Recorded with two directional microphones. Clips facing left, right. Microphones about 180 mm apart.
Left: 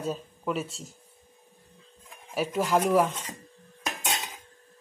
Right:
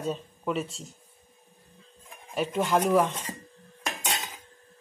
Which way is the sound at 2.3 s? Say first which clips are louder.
Even; 5° left (ahead or behind).